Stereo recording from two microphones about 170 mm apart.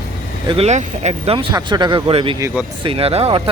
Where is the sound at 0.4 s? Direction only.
35° right (ahead or behind).